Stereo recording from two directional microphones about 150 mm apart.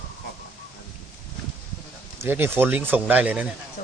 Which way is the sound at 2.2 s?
15° right (ahead or behind).